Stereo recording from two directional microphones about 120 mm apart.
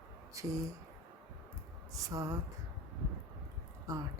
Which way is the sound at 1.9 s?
30° right (ahead or behind).